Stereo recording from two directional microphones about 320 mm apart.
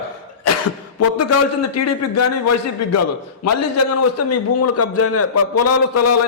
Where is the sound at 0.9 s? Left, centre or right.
Left.